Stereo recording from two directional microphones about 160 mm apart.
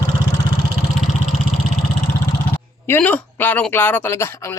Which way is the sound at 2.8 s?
10° left (ahead or behind).